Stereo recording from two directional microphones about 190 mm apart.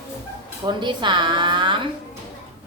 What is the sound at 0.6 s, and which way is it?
A woman's voice, 25° right (ahead or behind).